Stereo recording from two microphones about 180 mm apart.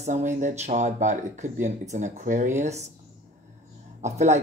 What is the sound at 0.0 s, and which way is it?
Speech, 40° right (ahead or behind).